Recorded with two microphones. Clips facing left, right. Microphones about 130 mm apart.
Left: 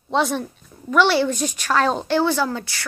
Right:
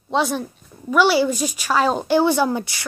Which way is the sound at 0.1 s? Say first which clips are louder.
Even; centre (ahead or behind).